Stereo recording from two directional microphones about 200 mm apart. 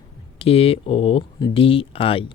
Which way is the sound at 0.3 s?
30° left (ahead or behind).